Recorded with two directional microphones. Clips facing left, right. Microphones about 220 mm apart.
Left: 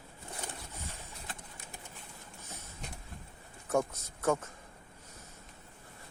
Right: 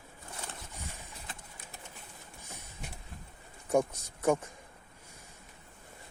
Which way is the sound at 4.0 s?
15° right (ahead or behind).